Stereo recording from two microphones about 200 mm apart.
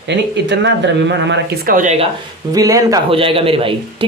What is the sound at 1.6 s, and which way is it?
Speech, 40° right (ahead or behind).